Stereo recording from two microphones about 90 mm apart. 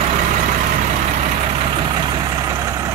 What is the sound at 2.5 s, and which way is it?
Vehicle, 40° right (ahead or behind).